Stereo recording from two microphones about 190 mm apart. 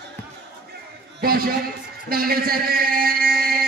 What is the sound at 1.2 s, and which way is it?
A man's voice, 50° right (ahead or behind).